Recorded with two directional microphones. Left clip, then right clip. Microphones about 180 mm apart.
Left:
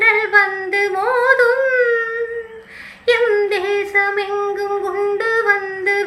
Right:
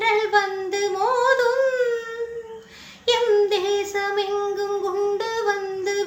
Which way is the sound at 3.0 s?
25° right (ahead or behind).